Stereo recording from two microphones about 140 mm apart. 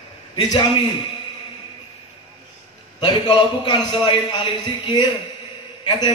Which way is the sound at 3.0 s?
35° left (ahead or behind).